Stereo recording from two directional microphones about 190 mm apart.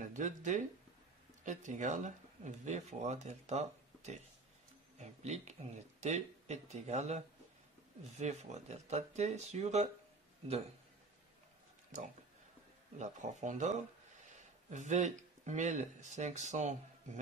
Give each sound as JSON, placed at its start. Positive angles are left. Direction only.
{"t": 0.0, "sound": "speech", "side_deg": -40}
{"t": 13.0, "sound": "speech", "side_deg": -40}